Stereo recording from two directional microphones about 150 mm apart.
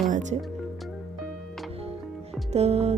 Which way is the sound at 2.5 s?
45° right (ahead or behind).